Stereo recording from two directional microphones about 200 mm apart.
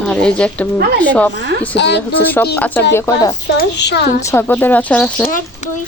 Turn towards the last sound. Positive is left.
turn(degrees=5)  # may be behind; listen again after turning